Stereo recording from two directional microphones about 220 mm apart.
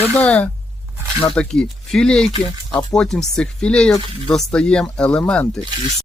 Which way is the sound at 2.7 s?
20° left (ahead or behind).